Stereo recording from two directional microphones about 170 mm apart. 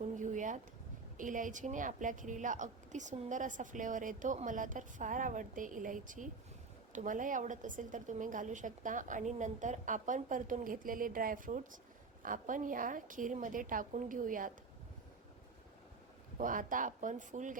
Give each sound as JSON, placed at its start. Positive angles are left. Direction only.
{"t": 0.2, "sound": "a sound", "side_deg": -45}
{"t": 1.1, "sound": "a woman's voice", "side_deg": -50}
{"t": 16.4, "sound": "a woman's voice", "side_deg": -50}